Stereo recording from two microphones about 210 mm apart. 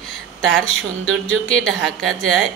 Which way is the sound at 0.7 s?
65° left (ahead or behind).